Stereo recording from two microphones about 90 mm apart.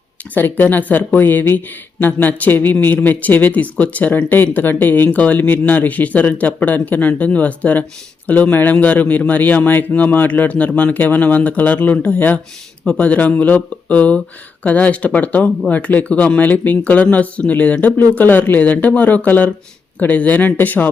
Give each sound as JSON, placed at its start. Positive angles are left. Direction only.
{"t": 0.3, "sound": "speech", "side_deg": 20}